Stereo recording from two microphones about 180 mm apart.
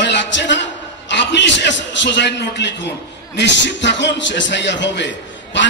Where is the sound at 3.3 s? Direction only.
80° left.